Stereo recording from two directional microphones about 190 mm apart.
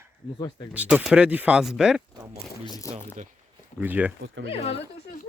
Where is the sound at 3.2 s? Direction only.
40° right (ahead or behind).